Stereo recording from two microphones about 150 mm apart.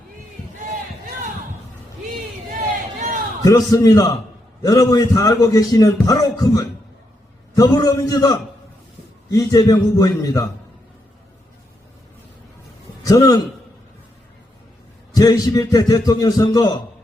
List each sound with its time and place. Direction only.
3.4 s a man's voice: 25° left (ahead or behind)
13.1 s a man's voice: 25° left (ahead or behind)
15.1 s a man's voice: 25° left (ahead or behind)